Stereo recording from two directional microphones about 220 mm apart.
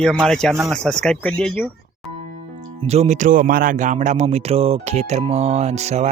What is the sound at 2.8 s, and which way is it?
Speech, 30° right (ahead or behind).